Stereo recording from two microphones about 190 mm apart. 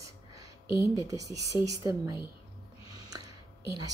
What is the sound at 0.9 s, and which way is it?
Speech, 20° right (ahead or behind).